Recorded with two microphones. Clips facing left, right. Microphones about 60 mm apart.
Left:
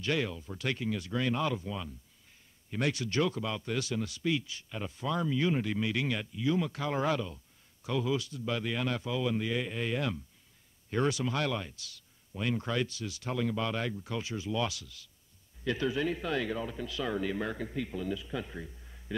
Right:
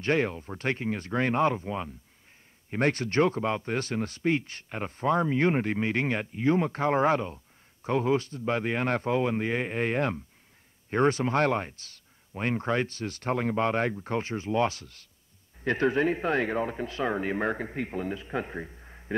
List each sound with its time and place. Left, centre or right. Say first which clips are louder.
0.0 s speech: right 6 dB; right